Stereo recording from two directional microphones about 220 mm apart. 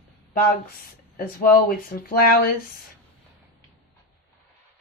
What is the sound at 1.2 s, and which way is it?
Speech, 40° left (ahead or behind).